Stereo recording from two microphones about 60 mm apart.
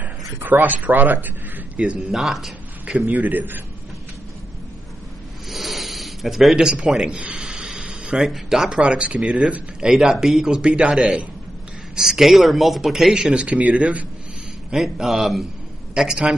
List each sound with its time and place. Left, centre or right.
0.0 s speech: right
1.8 s speech: centre
2.1 s speech: centre
3.1 s a man's voice: right
5.5 s a sound: centre
7.1 s speech: right
7.3 s a sound: centre
8.2 s speech: centre
9.9 s speech: centre
13.1 s speech: centre
14.7 s a man's voice: centre